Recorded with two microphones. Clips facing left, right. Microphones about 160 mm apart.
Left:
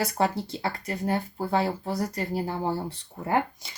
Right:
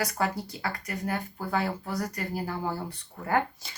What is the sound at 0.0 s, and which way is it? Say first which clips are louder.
Speech: left 3 dB; 25° left (ahead or behind).